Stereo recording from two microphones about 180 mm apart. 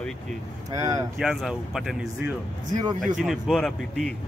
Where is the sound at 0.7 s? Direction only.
20° right (ahead or behind).